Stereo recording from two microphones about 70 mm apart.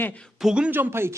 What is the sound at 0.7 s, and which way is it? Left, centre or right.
Speech, right.